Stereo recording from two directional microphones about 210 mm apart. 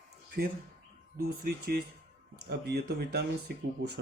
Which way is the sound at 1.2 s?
45° right (ahead or behind).